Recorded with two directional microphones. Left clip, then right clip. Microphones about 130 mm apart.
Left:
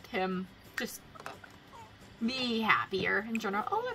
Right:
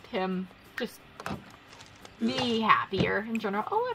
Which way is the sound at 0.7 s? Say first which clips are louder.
Right 2 dB; centre (ahead or behind).